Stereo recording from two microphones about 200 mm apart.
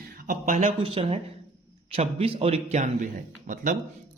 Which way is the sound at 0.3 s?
45° right (ahead or behind).